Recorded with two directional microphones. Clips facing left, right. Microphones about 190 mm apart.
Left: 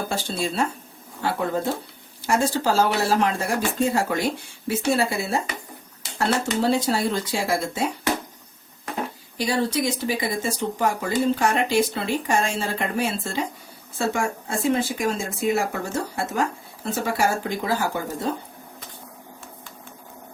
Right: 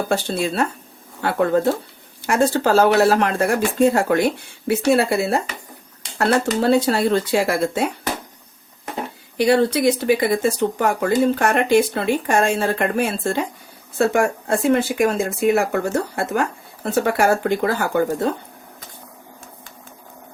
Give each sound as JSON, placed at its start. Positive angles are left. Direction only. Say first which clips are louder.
{"t": 0.1, "sound": "speech", "louder": "right 6 dB", "side_deg": -60}
{"t": 9.4, "sound": "speech", "louder": "right 7 dB", "side_deg": -65}